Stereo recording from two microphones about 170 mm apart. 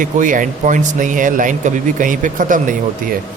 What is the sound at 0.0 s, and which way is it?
Speech, 50° right (ahead or behind).